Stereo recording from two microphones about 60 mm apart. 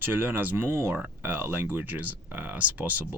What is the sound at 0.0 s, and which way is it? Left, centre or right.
Speech, right.